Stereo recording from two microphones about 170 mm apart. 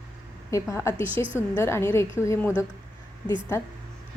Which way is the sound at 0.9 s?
30° right (ahead or behind).